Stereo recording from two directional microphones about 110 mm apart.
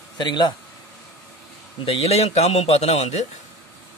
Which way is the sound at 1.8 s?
70° left (ahead or behind).